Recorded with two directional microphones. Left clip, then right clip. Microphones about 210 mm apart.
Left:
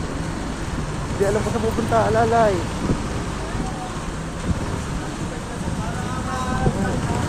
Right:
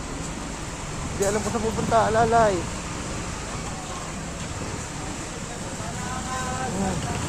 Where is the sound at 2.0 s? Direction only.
25° right (ahead or behind).